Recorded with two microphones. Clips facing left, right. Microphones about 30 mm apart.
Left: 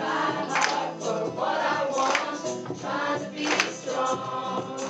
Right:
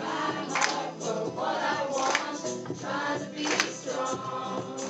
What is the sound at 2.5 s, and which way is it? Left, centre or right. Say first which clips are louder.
Music: left 3 dB; centre.